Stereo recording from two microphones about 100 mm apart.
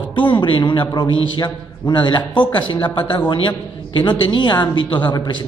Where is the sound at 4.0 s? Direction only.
50° left (ahead or behind).